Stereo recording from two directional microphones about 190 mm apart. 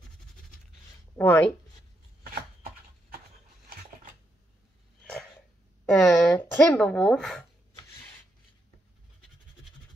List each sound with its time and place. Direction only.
1.1 s speech: 10° left (ahead or behind)
3.6 s a sound: 50° right (ahead or behind)
5.9 s speech: 5° left (ahead or behind)